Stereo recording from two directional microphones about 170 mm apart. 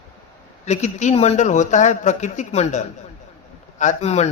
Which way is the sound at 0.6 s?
40° left (ahead or behind).